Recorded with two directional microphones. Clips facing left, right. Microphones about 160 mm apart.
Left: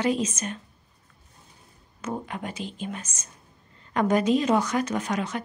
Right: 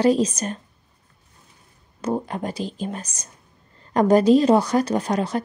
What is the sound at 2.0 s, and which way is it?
A woman's voice, 35° right (ahead or behind).